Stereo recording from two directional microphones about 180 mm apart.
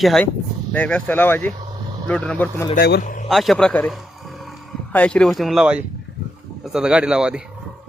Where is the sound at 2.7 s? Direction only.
65° left (ahead or behind).